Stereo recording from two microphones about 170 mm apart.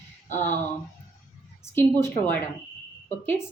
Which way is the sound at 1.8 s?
15° left (ahead or behind).